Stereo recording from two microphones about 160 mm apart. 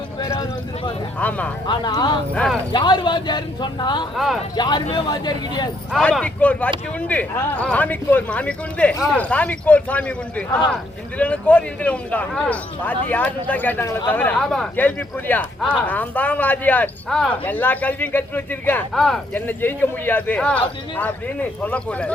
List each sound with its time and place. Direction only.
0.2 s a sound: 20° left (ahead or behind)
1.2 s speech: 10° left (ahead or behind)
1.6 s a man's voice: 25° left (ahead or behind)
2.3 s speech: 5° left (ahead or behind)
2.7 s a man's voice: 30° left (ahead or behind)
4.1 s speech: centre (ahead or behind)
4.5 s a man's voice: 25° left (ahead or behind)
5.9 s speech: 5° left (ahead or behind)